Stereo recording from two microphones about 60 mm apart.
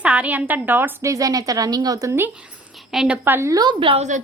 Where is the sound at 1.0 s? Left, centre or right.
Right.